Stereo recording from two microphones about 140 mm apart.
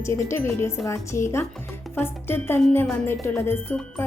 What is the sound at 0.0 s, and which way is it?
A woman's voice, 20° left (ahead or behind).